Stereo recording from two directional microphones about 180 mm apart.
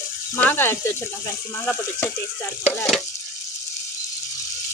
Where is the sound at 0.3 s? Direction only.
10° left (ahead or behind).